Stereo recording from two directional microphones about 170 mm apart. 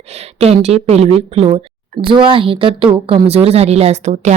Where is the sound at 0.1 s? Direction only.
40° right (ahead or behind).